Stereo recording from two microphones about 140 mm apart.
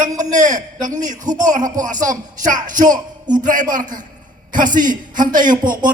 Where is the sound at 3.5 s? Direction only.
70° right (ahead or behind).